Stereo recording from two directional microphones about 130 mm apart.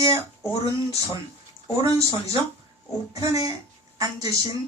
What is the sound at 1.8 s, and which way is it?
Speech, 25° right (ahead or behind).